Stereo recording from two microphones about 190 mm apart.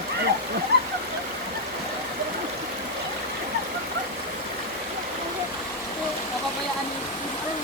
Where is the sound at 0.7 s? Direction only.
65° right (ahead or behind).